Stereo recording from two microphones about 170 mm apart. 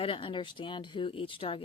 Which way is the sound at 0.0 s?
30° left (ahead or behind).